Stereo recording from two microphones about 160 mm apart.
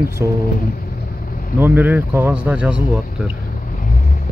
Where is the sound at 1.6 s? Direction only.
10° right (ahead or behind).